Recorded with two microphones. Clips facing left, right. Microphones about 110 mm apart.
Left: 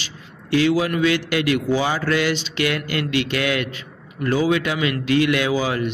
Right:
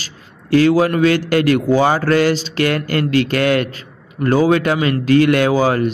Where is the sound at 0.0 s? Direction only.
45° right (ahead or behind).